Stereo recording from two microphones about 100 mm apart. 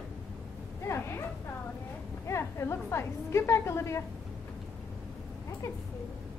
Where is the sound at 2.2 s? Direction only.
30° left (ahead or behind).